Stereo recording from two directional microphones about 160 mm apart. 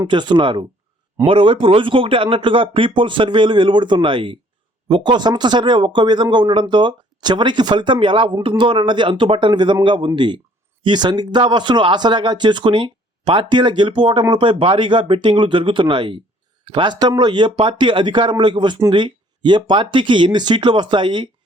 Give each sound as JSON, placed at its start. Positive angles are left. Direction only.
{"t": 0.0, "sound": "speech", "side_deg": -30}